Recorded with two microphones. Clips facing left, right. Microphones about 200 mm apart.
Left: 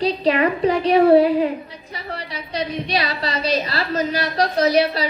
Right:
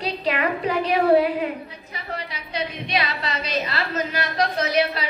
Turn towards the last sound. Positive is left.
turn(degrees=35)  # may be behind; listen again after turning